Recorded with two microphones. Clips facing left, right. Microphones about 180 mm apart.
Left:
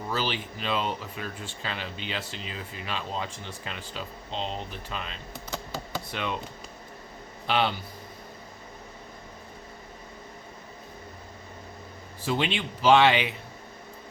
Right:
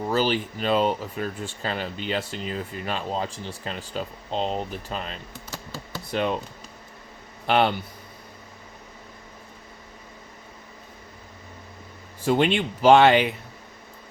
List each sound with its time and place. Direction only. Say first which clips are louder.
0.1 s speech: right 7 dB; 45° right (ahead or behind)
7.4 s a man's voice: right 5 dB; 50° right (ahead or behind)
12.2 s speech: right 7 dB; 50° right (ahead or behind)